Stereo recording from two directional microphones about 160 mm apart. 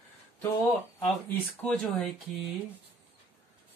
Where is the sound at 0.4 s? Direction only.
15° left (ahead or behind).